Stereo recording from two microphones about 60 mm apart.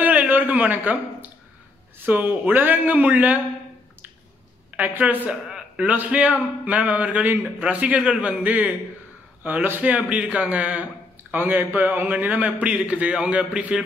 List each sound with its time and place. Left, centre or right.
0.0 s a sound: right
2.0 s a man's voice: right
4.7 s a man's voice: right
5.3 s a man's voice: centre